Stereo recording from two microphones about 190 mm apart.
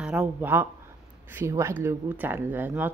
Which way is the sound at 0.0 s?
5° right (ahead or behind).